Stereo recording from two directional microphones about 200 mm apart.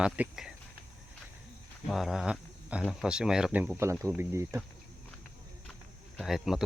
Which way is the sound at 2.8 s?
Centre (ahead or behind).